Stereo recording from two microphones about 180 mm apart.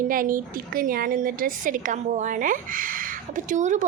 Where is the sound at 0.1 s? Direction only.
50° right (ahead or behind).